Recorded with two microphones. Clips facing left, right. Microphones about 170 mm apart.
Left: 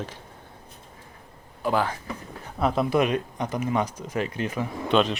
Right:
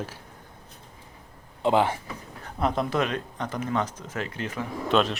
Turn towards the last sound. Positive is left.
turn(degrees=0)  # may be behind; listen again after turning